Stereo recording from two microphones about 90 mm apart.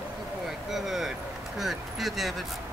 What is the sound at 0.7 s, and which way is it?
Speech, 5° right (ahead or behind).